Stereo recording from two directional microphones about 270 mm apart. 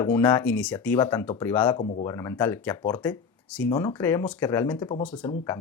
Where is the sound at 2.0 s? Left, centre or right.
Centre.